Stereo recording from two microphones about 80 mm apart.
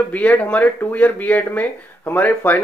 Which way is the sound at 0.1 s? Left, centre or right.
Centre.